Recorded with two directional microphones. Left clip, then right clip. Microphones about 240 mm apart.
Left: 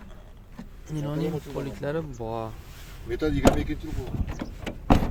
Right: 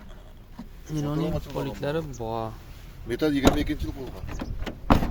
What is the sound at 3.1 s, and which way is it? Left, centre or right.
Speech, right.